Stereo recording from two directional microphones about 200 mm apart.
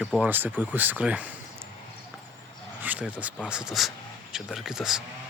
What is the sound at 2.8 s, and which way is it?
Speech, 10° right (ahead or behind).